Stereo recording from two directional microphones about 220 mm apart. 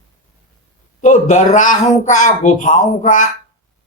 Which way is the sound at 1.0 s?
35° left (ahead or behind).